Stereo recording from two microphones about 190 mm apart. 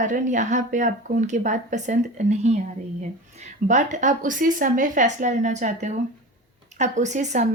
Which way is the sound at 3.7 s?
40° right (ahead or behind).